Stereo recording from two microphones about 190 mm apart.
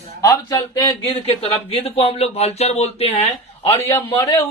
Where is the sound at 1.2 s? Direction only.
30° left (ahead or behind).